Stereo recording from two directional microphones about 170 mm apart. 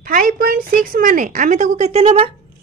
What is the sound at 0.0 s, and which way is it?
A woman's voice, 55° right (ahead or behind).